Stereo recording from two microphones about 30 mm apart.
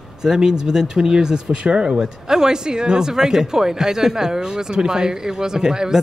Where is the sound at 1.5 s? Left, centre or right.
Right.